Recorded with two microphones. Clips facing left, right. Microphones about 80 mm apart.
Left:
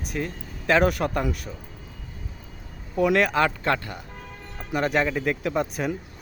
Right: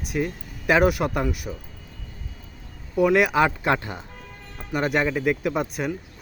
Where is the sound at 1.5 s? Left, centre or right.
Centre.